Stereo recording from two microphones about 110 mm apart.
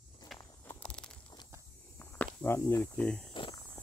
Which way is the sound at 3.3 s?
50° left (ahead or behind).